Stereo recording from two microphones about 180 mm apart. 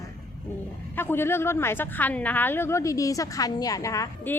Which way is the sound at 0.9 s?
10° left (ahead or behind).